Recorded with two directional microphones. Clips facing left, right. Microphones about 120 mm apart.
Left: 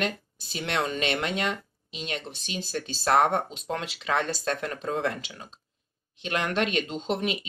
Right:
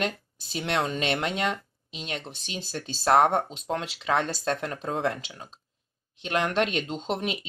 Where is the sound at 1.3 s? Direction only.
30° right (ahead or behind).